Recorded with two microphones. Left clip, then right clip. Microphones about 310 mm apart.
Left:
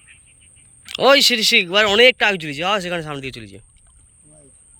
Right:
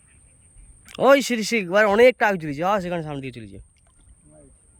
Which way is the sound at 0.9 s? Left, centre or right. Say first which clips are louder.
Left 4 dB; centre.